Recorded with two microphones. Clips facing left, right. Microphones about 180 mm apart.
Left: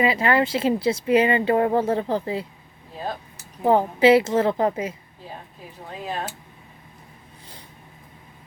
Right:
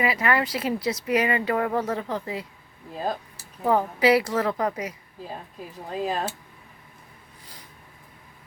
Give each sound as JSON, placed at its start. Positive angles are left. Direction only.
{"t": 0.0, "sound": "speech", "side_deg": 25}
{"t": 3.6, "sound": "speech", "side_deg": 25}
{"t": 6.1, "sound": "speech", "side_deg": -35}